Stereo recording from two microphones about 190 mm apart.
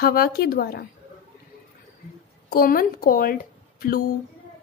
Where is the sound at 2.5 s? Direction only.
50° left (ahead or behind).